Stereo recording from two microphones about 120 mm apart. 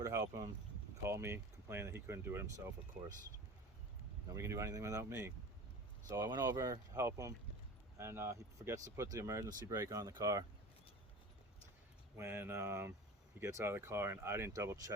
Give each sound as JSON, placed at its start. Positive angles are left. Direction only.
{"t": 0.0, "sound": "speech", "side_deg": -30}
{"t": 4.3, "sound": "speech", "side_deg": -25}
{"t": 12.1, "sound": "speech", "side_deg": -20}